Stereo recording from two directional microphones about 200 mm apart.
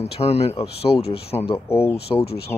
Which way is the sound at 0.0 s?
30° left (ahead or behind).